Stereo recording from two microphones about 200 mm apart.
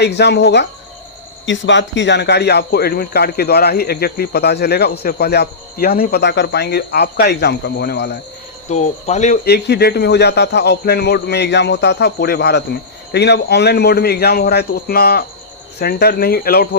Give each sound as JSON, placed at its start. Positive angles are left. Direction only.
{"t": 0.0, "sound": "a man's voice", "side_deg": 60}
{"t": 8.7, "sound": "speech", "side_deg": 35}
{"t": 9.4, "sound": "a man's voice", "side_deg": 55}